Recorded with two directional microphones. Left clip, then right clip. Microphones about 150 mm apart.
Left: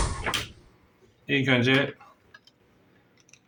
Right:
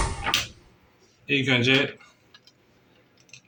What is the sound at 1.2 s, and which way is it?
Speech, 25° left (ahead or behind).